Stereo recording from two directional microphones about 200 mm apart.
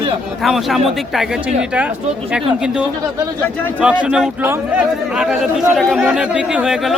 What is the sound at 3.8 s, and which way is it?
A man's voice, 5° right (ahead or behind).